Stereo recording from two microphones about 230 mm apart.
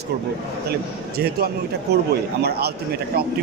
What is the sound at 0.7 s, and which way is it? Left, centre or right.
A man's voice, right.